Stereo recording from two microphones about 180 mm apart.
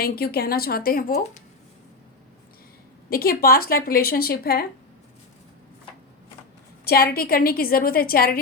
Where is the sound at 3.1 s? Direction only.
55° left (ahead or behind).